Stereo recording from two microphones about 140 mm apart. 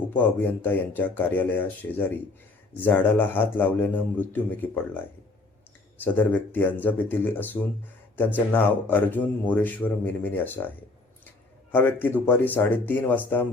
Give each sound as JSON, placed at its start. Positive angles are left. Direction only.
{"t": 0.4, "sound": "a man's voice", "side_deg": 15}
{"t": 11.7, "sound": "a man's voice", "side_deg": 15}